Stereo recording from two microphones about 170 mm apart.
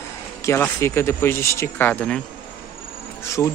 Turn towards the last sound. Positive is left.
turn(degrees=15)  # may be behind; listen again after turning